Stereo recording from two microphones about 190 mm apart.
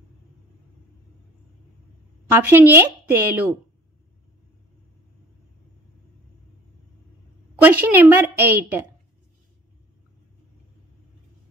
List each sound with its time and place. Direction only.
2.2 s a woman's voice: 10° right (ahead or behind)
7.6 s a woman's voice: 10° right (ahead or behind)